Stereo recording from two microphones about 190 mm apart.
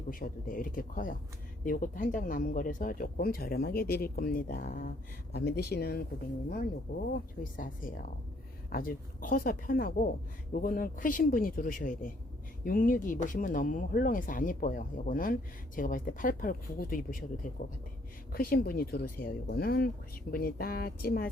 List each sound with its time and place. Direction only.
0.1 s speech: 45° left (ahead or behind)
7.1 s speech: 45° left (ahead or behind)